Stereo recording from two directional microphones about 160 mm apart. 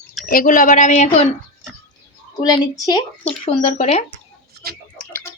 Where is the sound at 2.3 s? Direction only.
20° left (ahead or behind).